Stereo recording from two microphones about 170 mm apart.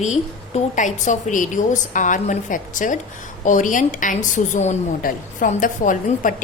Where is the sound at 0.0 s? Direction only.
45° left (ahead or behind).